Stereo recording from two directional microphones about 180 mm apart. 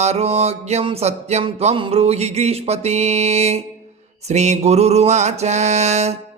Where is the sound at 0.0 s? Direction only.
35° right (ahead or behind).